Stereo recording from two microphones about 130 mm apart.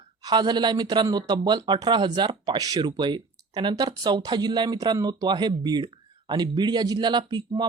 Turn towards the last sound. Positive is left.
turn(degrees=-35)  # may be behind; listen again after turning